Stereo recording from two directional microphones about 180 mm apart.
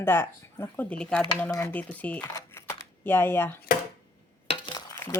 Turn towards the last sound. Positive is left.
turn(degrees=25)  # may be behind; listen again after turning